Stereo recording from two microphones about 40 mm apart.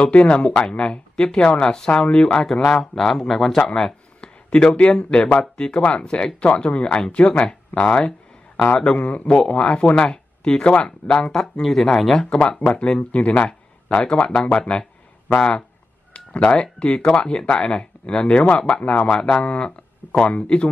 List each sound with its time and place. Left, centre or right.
0.0 s speech: left
2.4 s speech: centre
4.2 s speech: left
9.1 s speech: left
9.4 s speech: left
11.6 s speech: centre
12.3 s speech: left
16.8 s speech: left